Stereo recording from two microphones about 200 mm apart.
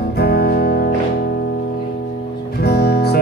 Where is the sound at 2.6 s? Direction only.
55° left (ahead or behind).